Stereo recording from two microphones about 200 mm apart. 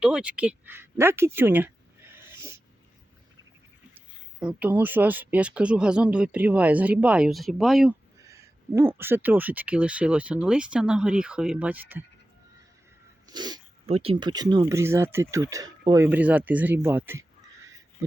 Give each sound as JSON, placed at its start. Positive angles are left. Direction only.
{"t": 0.0, "sound": "a sound", "side_deg": -5}
{"t": 4.4, "sound": "speech", "side_deg": -5}
{"t": 8.2, "sound": "speech", "side_deg": -15}
{"t": 13.2, "sound": "speech", "side_deg": -20}